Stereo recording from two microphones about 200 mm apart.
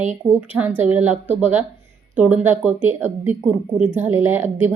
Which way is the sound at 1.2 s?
35° right (ahead or behind).